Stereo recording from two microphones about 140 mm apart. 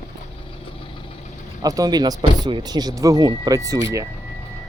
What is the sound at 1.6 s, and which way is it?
Speech, 25° right (ahead or behind).